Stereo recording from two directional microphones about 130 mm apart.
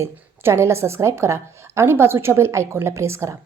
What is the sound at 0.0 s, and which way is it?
A woman's voice, 20° right (ahead or behind).